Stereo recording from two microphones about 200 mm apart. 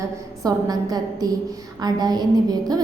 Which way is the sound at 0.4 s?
20° right (ahead or behind).